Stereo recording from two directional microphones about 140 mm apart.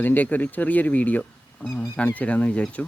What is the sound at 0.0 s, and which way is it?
Speech, 10° left (ahead or behind).